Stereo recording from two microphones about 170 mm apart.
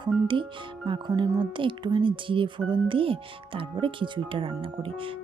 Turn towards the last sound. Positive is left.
turn(degrees=-30)  # may be behind; listen again after turning